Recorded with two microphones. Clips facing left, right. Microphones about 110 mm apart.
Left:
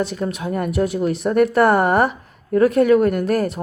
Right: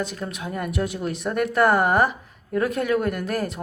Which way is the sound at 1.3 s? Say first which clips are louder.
Left 5 dB; 50° left (ahead or behind).